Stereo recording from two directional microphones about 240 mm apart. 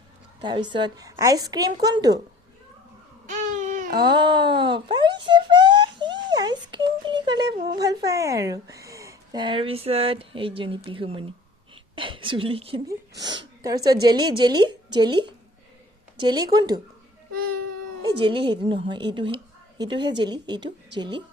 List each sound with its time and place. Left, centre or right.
0.7 s a woman's voice: centre
3.2 s babbling: right
3.9 s a sound: centre
7.8 s speech: centre
11.7 s a sound: right
13.8 s a woman's voice: centre
18.0 s speech: right